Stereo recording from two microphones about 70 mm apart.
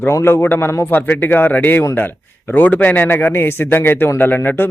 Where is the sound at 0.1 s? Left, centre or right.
Left.